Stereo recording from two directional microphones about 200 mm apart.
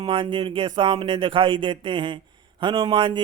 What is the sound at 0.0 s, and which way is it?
Speech, 25° right (ahead or behind).